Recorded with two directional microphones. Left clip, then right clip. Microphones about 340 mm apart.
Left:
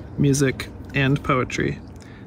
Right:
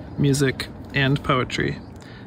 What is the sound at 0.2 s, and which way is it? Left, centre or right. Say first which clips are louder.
Speech: left 1 dB; centre.